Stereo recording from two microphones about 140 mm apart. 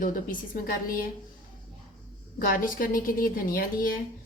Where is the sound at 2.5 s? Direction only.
90° left.